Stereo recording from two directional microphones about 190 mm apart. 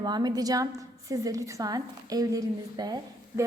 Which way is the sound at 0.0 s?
20° right (ahead or behind).